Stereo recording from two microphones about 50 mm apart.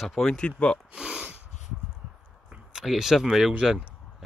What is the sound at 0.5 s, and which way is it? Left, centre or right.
Speech, centre.